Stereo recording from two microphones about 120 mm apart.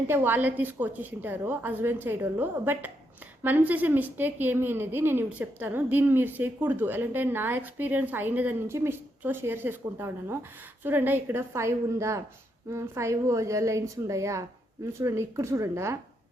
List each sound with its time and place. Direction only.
0.1 s a woman's voice: 15° right (ahead or behind)